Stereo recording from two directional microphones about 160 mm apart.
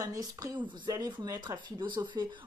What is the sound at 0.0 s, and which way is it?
Speech, 20° right (ahead or behind).